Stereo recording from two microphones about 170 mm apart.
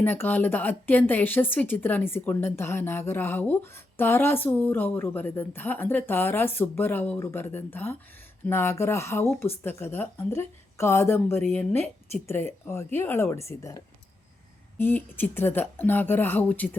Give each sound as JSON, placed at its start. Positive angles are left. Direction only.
{"t": 0.0, "sound": "speech", "side_deg": 10}